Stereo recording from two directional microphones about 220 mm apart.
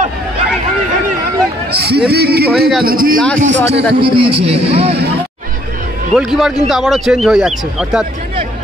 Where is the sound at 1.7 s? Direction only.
50° right (ahead or behind).